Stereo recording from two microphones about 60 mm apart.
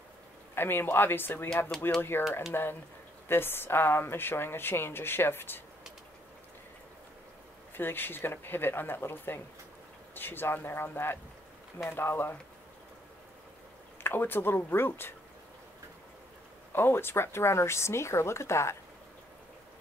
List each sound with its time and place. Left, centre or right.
0.6 s speech: left
7.7 s speech: left
14.0 s speech: left
16.7 s speech: left